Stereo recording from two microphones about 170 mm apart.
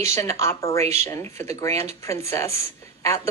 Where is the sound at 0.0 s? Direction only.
20° left (ahead or behind).